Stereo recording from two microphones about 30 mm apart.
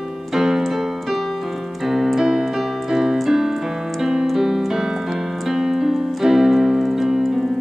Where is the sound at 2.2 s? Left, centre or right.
Right.